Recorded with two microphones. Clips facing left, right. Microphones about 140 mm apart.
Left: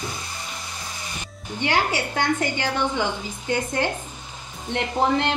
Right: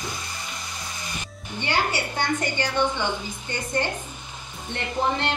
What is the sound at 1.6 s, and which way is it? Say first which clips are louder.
A woman's voice: left 3 dB; 90° left.